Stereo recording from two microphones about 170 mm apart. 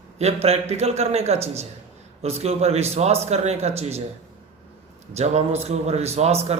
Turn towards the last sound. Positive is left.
turn(degrees=-40)  # may be behind; listen again after turning